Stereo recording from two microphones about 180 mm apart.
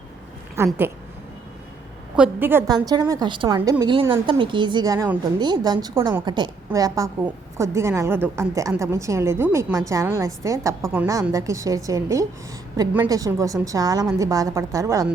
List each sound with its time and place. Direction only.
0.5 s a woman's voice: 15° right (ahead or behind)
2.1 s a woman's voice: 10° right (ahead or behind)
2.7 s a woman's voice: 25° right (ahead or behind)